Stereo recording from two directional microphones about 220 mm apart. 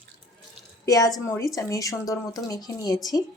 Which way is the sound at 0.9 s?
15° left (ahead or behind).